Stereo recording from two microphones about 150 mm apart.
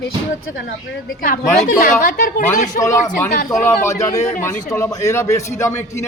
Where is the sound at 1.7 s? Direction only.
75° left (ahead or behind).